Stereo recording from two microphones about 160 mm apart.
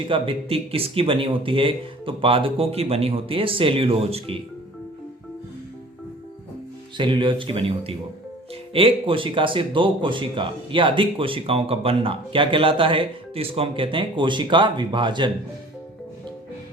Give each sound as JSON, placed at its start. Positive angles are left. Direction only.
{"t": 0.1, "sound": "speech", "side_deg": -35}
{"t": 6.9, "sound": "speech", "side_deg": -30}